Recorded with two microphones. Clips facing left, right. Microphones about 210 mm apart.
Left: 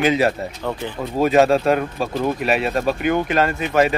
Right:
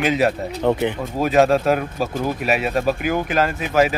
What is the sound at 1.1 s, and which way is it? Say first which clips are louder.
Speech: left 2 dB; centre (ahead or behind).